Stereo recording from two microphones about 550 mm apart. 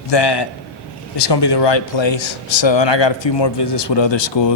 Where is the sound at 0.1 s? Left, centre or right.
Left.